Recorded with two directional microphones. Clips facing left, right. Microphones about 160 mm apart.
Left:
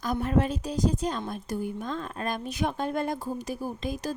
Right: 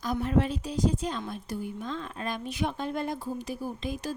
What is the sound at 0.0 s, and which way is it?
Speech, 50° left (ahead or behind).